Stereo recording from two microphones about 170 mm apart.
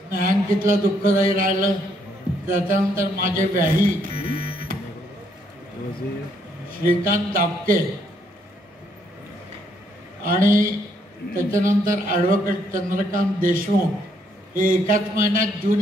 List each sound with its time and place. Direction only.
0.1 s a man's voice: 55° right (ahead or behind)
6.8 s a man's voice: 55° right (ahead or behind)
10.2 s a man's voice: 55° right (ahead or behind)